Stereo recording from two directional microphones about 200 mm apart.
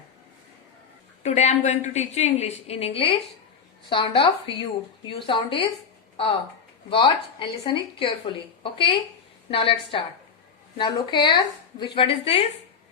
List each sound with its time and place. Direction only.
1.2 s a woman's voice: 35° left (ahead or behind)
6.9 s a woman's voice: 25° left (ahead or behind)